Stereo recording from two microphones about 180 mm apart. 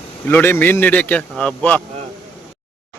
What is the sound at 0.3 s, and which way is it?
A man's voice, 10° left (ahead or behind).